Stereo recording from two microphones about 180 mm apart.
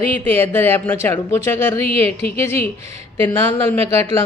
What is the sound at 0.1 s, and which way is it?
A woman's voice, 10° left (ahead or behind).